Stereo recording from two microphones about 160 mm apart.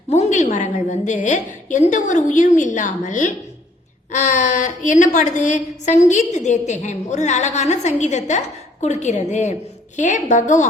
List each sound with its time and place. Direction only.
0.1 s a woman's voice: 45° left (ahead or behind)